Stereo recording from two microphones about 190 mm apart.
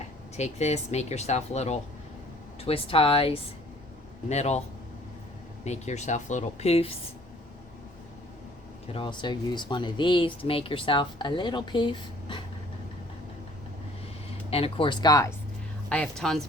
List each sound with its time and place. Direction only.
0.3 s speech: 35° left (ahead or behind)
5.6 s speech: 35° left (ahead or behind)
8.9 s speech: 25° left (ahead or behind)
14.5 s speech: 30° left (ahead or behind)
15.9 s speech: 5° left (ahead or behind)